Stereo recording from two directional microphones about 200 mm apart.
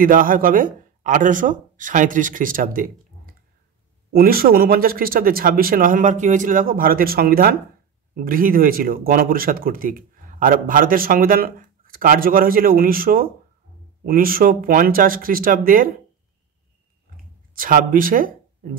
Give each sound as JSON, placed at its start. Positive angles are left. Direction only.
{"t": 0.0, "sound": "speech", "side_deg": -45}
{"t": 17.6, "sound": "speech", "side_deg": -45}